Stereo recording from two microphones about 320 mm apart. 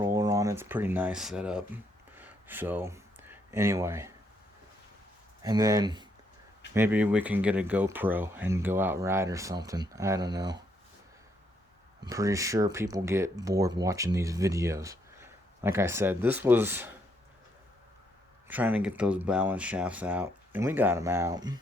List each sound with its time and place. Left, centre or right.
0.0 s speech: centre
5.4 s speech: centre
12.0 s speech: centre
18.4 s speech: centre